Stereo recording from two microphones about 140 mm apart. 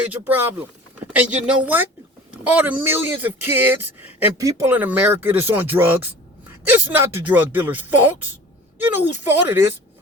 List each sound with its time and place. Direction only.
0.3 s speech: 15° right (ahead or behind)